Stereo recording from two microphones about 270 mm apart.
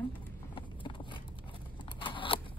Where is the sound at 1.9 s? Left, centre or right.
Centre.